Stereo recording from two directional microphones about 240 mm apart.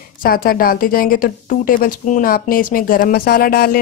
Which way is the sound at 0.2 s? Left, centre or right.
Left.